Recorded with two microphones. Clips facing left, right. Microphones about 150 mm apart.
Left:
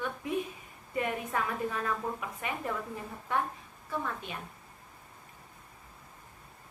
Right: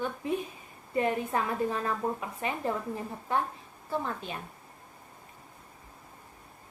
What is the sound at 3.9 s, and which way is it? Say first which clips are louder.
Speech: right 3 dB; 30° right (ahead or behind).